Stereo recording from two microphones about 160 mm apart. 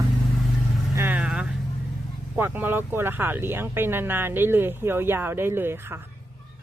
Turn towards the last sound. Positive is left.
turn(degrees=-15)  # may be behind; listen again after turning